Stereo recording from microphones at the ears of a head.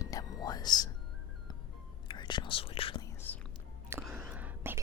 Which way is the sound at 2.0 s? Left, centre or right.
Left.